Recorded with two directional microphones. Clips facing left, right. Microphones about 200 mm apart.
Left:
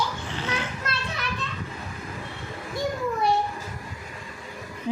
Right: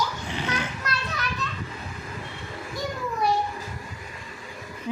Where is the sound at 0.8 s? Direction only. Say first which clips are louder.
Right 1 dB; 30° left (ahead or behind).